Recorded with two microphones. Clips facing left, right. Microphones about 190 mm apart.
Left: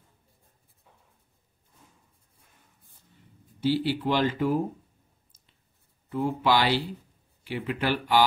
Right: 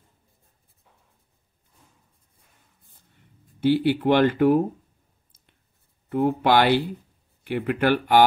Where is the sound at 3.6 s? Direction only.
60° right (ahead or behind).